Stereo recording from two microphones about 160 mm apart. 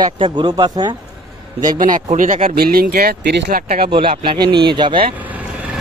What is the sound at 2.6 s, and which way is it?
Speech, 75° right (ahead or behind).